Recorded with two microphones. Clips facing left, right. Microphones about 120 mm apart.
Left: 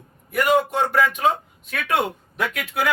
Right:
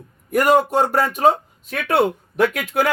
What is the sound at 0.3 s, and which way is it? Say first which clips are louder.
Speech: right 4 dB; 45° right (ahead or behind).